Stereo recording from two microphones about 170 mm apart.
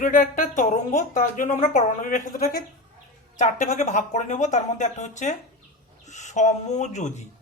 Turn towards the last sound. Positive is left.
turn(degrees=45)  # may be behind; listen again after turning